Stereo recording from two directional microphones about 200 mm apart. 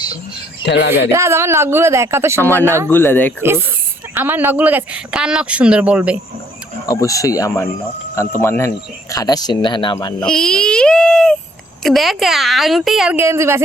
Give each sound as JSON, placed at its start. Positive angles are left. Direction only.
{"t": 0.6, "sound": "speech", "side_deg": 55}
{"t": 1.1, "sound": "speech", "side_deg": -15}
{"t": 2.4, "sound": "speech", "side_deg": 10}
{"t": 2.6, "sound": "speech", "side_deg": -15}
{"t": 2.9, "sound": "speech", "side_deg": 10}
{"t": 4.1, "sound": "speech", "side_deg": -10}
{"t": 6.8, "sound": "speech", "side_deg": 15}
{"t": 10.2, "sound": "a woman's voice", "side_deg": 5}